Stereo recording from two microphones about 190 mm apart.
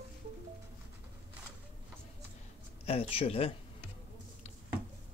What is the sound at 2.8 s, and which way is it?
Speech, 30° left (ahead or behind).